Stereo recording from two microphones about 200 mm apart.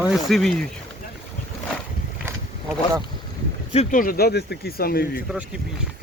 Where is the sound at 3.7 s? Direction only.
35° left (ahead or behind).